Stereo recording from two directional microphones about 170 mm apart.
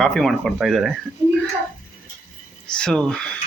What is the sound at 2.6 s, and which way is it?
Speech, 5° left (ahead or behind).